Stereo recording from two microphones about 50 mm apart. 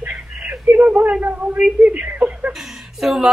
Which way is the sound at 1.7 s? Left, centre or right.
Right.